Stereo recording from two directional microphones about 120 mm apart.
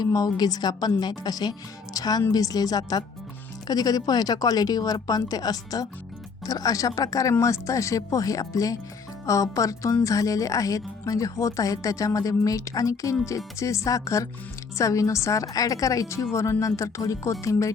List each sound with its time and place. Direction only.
0.0 s speech: 30° left (ahead or behind)